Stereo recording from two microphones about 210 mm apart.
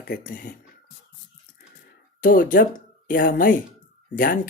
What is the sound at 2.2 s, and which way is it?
Speech, 40° left (ahead or behind).